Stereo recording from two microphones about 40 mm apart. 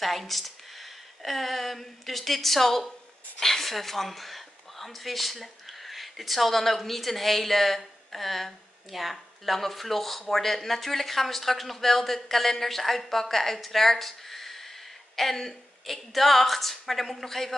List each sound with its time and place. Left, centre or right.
0.0 s speech: centre